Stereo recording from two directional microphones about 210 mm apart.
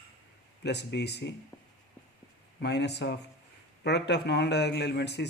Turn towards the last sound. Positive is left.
turn(degrees=55)  # may be behind; listen again after turning